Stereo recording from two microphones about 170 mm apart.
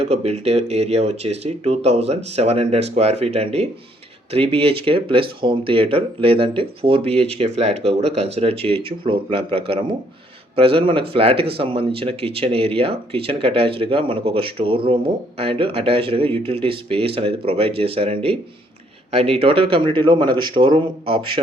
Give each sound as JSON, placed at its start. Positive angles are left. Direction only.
{"t": 0.0, "sound": "speech", "side_deg": -40}